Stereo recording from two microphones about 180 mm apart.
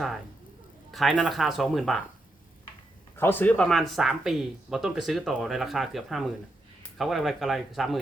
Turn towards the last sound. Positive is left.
turn(degrees=0)  # may be behind; listen again after turning